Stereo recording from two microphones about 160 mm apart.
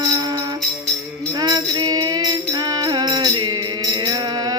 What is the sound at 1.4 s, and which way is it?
Music, 25° right (ahead or behind).